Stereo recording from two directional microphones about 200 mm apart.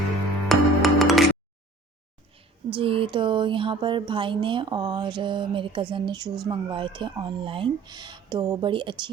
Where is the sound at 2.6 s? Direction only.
25° right (ahead or behind).